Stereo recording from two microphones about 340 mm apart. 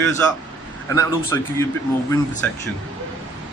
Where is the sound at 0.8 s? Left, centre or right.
Centre.